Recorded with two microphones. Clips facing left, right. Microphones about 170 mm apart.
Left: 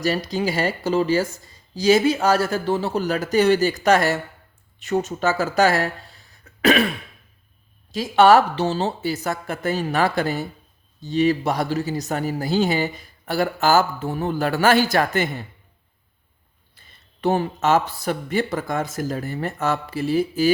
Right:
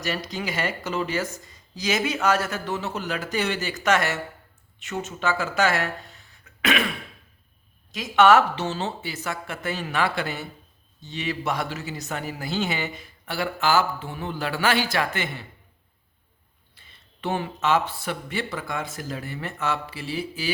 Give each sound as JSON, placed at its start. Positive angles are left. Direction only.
{"t": 0.0, "sound": "speech", "side_deg": 35}
{"t": 7.9, "sound": "speech", "side_deg": 35}
{"t": 16.7, "sound": "speech", "side_deg": 40}